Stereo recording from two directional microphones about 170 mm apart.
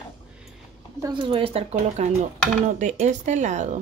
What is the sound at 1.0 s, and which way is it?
Speech, 30° right (ahead or behind).